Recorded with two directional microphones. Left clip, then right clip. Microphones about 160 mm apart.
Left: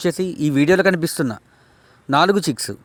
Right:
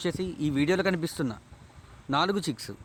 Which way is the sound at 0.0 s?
45° left (ahead or behind).